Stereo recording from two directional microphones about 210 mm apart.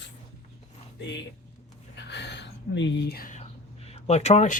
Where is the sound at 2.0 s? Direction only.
55° left (ahead or behind).